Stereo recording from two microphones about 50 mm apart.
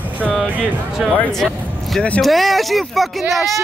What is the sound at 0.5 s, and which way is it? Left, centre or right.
Speech, right.